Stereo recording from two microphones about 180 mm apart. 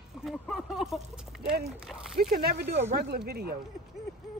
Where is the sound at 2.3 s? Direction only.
60° right (ahead or behind).